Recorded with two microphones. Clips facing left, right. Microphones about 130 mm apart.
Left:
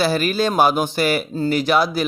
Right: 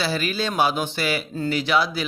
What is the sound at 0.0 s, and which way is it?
Speech, 45° left (ahead or behind).